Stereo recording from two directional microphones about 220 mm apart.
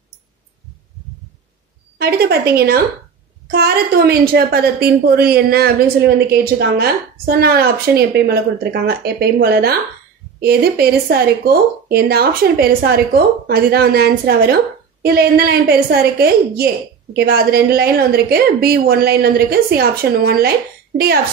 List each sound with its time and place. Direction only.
2.0 s speech: 45° right (ahead or behind)